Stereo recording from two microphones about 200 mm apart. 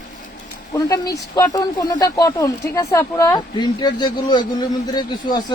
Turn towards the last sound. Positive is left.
turn(degrees=20)  # may be behind; listen again after turning